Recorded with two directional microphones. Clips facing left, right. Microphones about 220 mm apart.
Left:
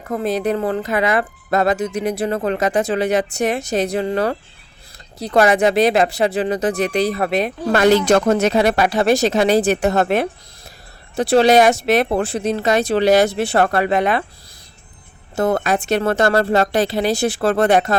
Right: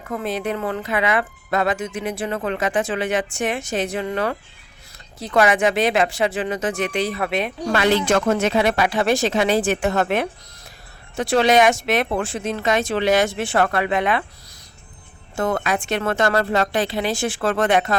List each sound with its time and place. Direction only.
0.0 s speech: 40° left (ahead or behind)
15.4 s speech: 35° left (ahead or behind)